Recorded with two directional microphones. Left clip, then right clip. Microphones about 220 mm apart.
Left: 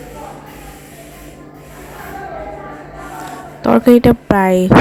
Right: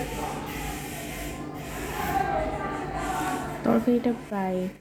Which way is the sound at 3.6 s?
45° left (ahead or behind).